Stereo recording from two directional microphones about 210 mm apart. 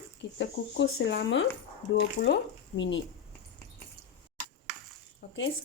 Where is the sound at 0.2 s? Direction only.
55° left (ahead or behind).